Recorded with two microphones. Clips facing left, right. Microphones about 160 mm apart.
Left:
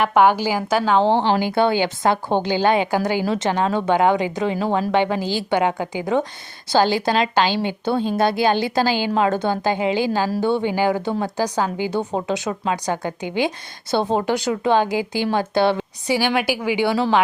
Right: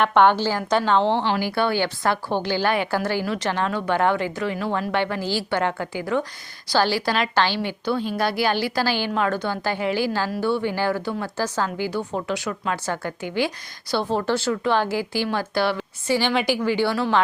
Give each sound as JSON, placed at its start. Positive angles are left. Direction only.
{"t": 0.0, "sound": "a woman's voice", "side_deg": 10}
{"t": 16.1, "sound": "speech", "side_deg": 10}